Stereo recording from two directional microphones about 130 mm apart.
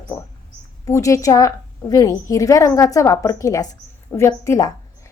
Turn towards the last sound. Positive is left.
turn(degrees=20)  # may be behind; listen again after turning